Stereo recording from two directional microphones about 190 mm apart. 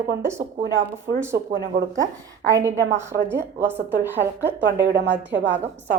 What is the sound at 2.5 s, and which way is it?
A woman's voice, 15° right (ahead or behind).